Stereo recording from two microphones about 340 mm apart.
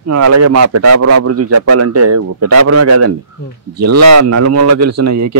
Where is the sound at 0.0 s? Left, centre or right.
Right.